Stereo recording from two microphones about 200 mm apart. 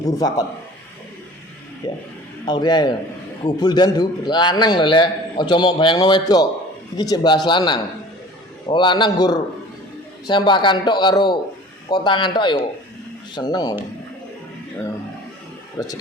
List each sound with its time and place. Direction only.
0.0 s a man's voice: 15° left (ahead or behind)
1.8 s a man's voice: 20° left (ahead or behind)